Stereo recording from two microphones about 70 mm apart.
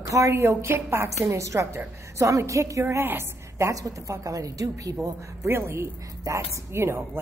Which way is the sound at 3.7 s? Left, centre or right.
Right.